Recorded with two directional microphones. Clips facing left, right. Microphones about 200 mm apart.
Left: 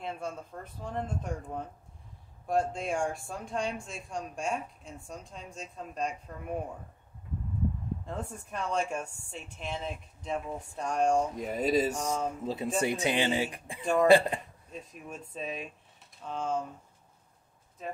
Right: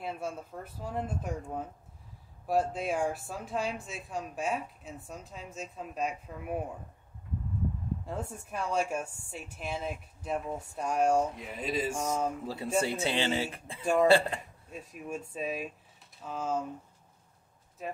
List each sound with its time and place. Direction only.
0.0 s a woman's voice: 5° right (ahead or behind)
8.0 s a woman's voice: 5° right (ahead or behind)
11.3 s speech: 40° left (ahead or behind)
12.4 s speech: 20° left (ahead or behind)
14.7 s a woman's voice: 5° right (ahead or behind)